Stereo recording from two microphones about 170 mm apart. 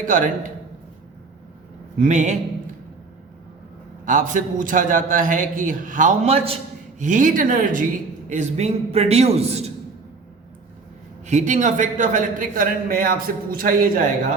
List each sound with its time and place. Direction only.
0.0 s a man's voice: 50° right (ahead or behind)
2.0 s a man's voice: 45° right (ahead or behind)
4.0 s a man's voice: 50° right (ahead or behind)
7.0 s a man's voice: 50° right (ahead or behind)
11.3 s a man's voice: 45° right (ahead or behind)